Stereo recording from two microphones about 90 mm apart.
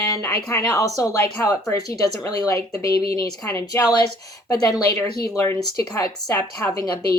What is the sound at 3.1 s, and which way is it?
A woman's voice, 40° left (ahead or behind).